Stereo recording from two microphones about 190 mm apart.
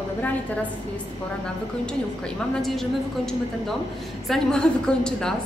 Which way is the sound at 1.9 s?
5° left (ahead or behind).